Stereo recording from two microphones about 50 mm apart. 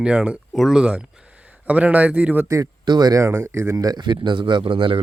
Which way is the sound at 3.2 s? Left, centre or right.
Right.